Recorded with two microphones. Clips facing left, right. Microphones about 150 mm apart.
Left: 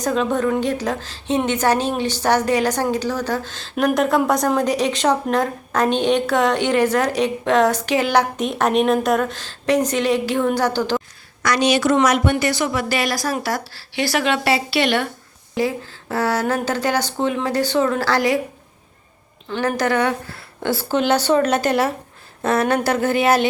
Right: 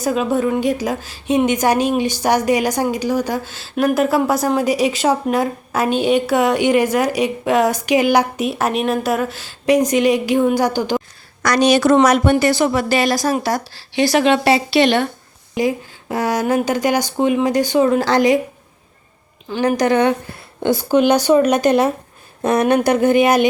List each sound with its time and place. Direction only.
0.0 s a woman's voice: 10° right (ahead or behind)
11.4 s a woman's voice: 40° right (ahead or behind); by 18.3 s 20° right (ahead or behind)
19.5 s a woman's voice: 15° right (ahead or behind)